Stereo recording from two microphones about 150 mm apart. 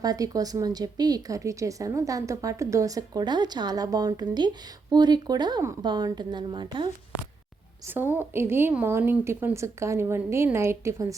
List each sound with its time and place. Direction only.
0.0 s speech: 25° right (ahead or behind)
7.9 s a woman's voice: 15° right (ahead or behind)